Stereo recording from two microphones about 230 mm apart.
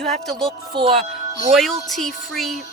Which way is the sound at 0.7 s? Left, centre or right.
Right.